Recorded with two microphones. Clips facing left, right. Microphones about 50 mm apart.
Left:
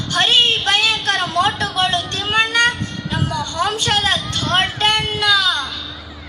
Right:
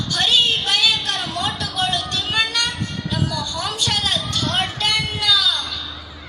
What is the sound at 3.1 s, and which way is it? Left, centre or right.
A woman's voice, left.